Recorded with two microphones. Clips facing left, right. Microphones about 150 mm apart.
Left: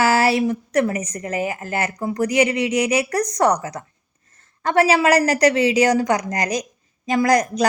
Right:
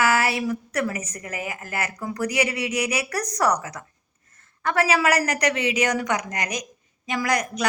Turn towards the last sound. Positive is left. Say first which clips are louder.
# left 7 dB
turn(degrees=35)  # may be behind; listen again after turning